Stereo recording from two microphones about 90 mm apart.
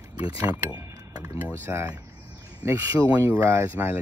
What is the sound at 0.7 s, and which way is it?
Speech, 45° right (ahead or behind).